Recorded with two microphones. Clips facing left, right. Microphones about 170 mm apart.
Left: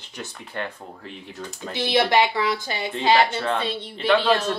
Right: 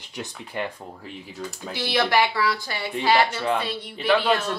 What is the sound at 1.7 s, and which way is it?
A woman's voice, 20° left (ahead or behind).